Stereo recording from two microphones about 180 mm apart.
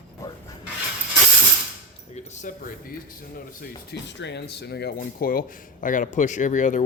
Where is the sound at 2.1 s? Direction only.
40° left (ahead or behind).